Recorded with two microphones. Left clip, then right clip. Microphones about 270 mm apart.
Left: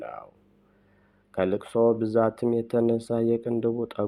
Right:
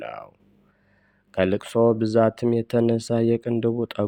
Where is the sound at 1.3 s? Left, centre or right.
Right.